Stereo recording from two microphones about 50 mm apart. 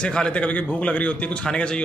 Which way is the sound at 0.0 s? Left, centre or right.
Centre.